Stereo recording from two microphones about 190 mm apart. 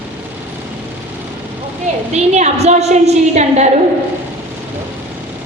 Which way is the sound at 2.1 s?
35° right (ahead or behind).